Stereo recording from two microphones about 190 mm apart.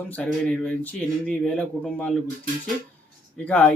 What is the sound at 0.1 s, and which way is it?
Speech, 5° left (ahead or behind).